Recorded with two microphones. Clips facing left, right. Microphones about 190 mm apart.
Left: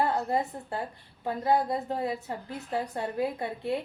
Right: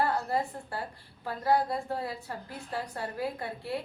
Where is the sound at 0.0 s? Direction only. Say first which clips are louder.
Left 2 dB; 20° left (ahead or behind).